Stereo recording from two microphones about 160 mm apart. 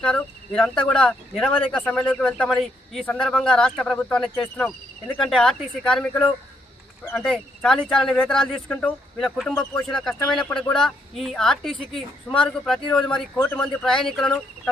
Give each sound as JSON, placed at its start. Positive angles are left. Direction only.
{"t": 0.0, "sound": "speech", "side_deg": 5}
{"t": 7.0, "sound": "speech", "side_deg": 15}
{"t": 7.3, "sound": "speech", "side_deg": 5}